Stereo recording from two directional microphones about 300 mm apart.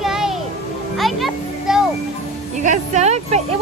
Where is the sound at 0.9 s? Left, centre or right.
Centre.